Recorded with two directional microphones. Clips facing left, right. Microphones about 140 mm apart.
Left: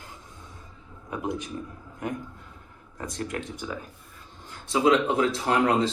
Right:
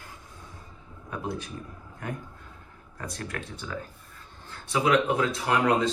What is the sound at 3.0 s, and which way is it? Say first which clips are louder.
Speech: left 4 dB; 20° left (ahead or behind).